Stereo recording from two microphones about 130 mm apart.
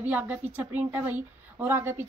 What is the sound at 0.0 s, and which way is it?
A woman's voice, 15° right (ahead or behind).